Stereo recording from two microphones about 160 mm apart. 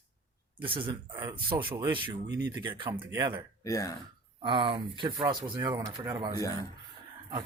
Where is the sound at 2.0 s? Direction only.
20° right (ahead or behind).